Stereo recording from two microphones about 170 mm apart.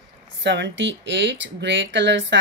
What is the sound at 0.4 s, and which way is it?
Speech, 90° right.